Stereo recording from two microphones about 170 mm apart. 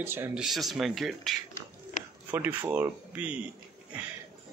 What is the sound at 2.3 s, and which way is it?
Speech, 10° right (ahead or behind).